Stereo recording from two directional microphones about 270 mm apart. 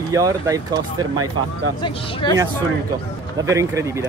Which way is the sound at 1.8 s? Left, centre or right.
Centre.